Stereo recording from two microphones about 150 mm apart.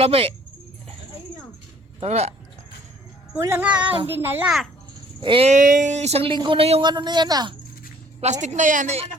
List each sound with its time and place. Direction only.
0.0 s speech: 40° right (ahead or behind)
2.0 s speech: 45° right (ahead or behind)
3.3 s a child's voice: 15° right (ahead or behind)
4.4 s a child's voice: centre (ahead or behind)
5.2 s speech: 35° right (ahead or behind)
5.5 s speech: 60° right (ahead or behind); by 6.9 s 40° right (ahead or behind)
6.9 s speech: 30° right (ahead or behind)
8.2 s speech: 50° right (ahead or behind)